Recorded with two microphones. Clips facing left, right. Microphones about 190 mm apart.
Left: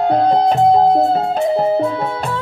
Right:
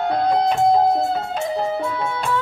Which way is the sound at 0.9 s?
25° left (ahead or behind).